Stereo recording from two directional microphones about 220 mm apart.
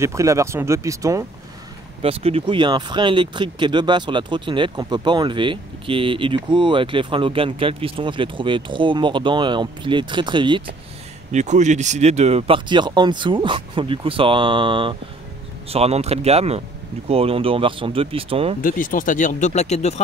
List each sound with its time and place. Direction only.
0.0 s speech: 15° right (ahead or behind)
2.0 s speech: 25° right (ahead or behind)
11.3 s speech: 30° right (ahead or behind)
18.6 s speech: 40° left (ahead or behind)